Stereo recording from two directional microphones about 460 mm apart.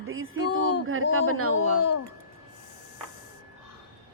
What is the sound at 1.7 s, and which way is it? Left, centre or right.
Speech, left.